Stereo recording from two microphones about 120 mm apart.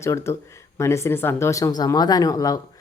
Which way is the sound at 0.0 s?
25° left (ahead or behind).